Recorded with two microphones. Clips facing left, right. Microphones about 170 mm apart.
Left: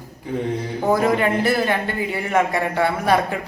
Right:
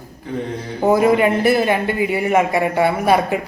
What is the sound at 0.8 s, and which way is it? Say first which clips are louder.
Speech: right 5 dB; 15° right (ahead or behind).